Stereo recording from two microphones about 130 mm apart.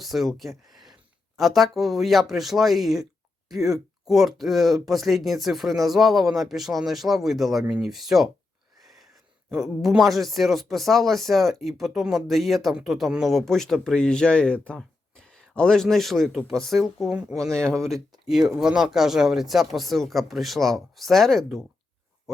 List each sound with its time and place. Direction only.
0.0 s speech: centre (ahead or behind)
9.8 s speech: centre (ahead or behind)
17.3 s speech: 25° right (ahead or behind)
18.1 s speech: centre (ahead or behind)